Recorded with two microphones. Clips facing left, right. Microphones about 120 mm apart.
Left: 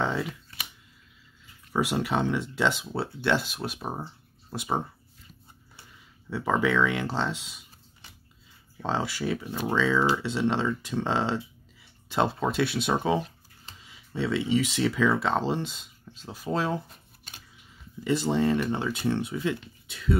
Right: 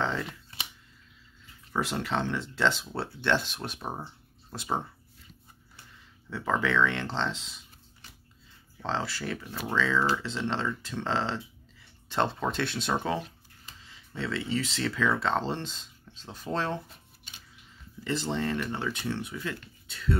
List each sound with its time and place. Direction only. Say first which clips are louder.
0.0 s a sound: left 2 dB; 10° left (ahead or behind)
0.3 s a sound: left 2 dB; 25° right (ahead or behind)
1.7 s speech: left 4 dB; 10° left (ahead or behind)
6.3 s speech: left 3 dB; 10° left (ahead or behind)
8.8 s speech: left 4 dB; 15° left (ahead or behind)
18.0 s speech: left 6 dB; 10° left (ahead or behind)